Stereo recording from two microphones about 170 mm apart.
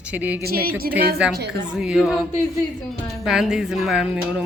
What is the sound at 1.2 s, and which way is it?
A woman's voice, 5° right (ahead or behind).